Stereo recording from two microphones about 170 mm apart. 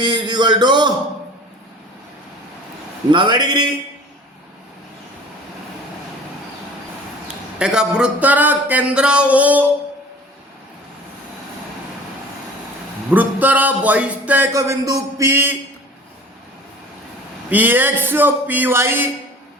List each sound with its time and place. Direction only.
0.0 s speech: 30° right (ahead or behind)
3.1 s a man's voice: 25° right (ahead or behind)
7.3 s speech: 5° right (ahead or behind)
13.1 s speech: 10° right (ahead or behind)
17.5 s speech: 10° right (ahead or behind)